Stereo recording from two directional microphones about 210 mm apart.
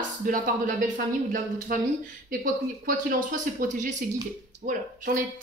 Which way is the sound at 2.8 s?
40° right (ahead or behind).